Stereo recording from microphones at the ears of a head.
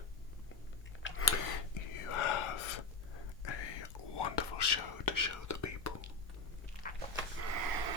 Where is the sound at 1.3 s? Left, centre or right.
Left.